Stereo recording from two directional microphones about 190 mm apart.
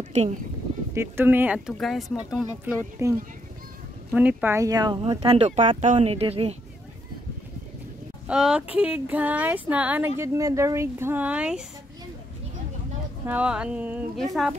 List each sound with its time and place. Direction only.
0.1 s speech: 35° right (ahead or behind)
0.9 s speech: 10° right (ahead or behind)
2.3 s speech: 10° right (ahead or behind)
5.3 s speech: 35° right (ahead or behind)
8.3 s speech: 5° right (ahead or behind)
13.2 s speech: 10° right (ahead or behind)